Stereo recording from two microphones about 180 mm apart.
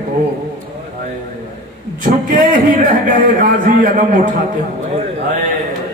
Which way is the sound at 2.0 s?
50° right (ahead or behind).